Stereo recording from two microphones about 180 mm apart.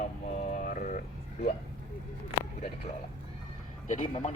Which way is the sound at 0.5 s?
45° left (ahead or behind).